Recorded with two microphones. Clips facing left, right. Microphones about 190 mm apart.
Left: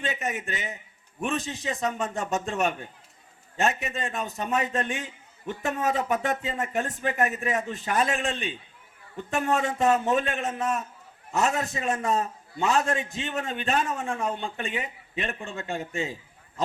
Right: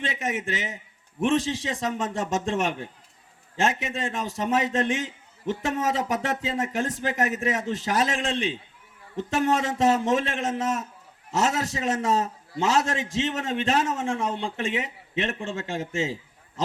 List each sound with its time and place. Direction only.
0.0 s a man's voice: 90° right